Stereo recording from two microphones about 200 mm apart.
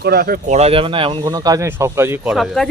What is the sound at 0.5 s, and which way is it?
Speech, 30° right (ahead or behind).